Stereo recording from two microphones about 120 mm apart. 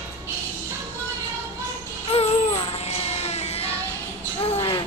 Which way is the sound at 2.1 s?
55° left (ahead or behind).